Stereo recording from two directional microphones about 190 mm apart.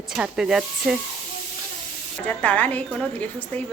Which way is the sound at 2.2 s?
10° left (ahead or behind).